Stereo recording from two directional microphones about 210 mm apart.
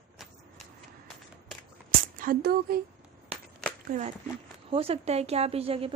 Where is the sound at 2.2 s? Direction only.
45° right (ahead or behind).